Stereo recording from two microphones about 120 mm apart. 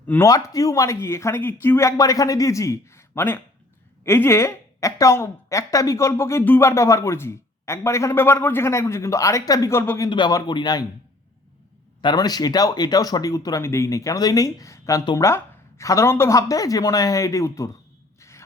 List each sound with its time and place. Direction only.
0.1 s a woman's voice: 25° left (ahead or behind)
10.1 s speech: 35° left (ahead or behind)
12.0 s a woman's voice: 35° left (ahead or behind)
18.2 s a sound: 25° left (ahead or behind)